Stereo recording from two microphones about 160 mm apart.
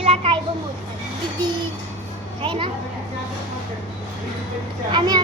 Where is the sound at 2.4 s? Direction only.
35° right (ahead or behind).